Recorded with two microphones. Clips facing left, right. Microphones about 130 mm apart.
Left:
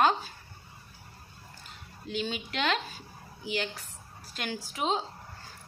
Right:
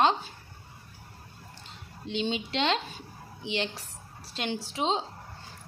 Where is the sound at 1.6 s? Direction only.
25° right (ahead or behind).